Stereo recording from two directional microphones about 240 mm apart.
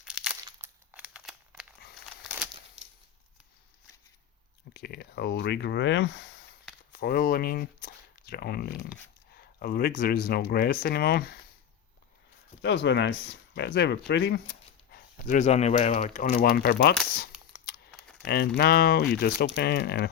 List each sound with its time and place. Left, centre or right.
0.0 s crumpling: centre
4.7 s speech: left
12.6 s speech: left
14.9 s speech: left
18.3 s speech: left